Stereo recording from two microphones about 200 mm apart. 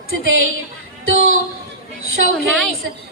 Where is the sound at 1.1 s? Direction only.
90° right.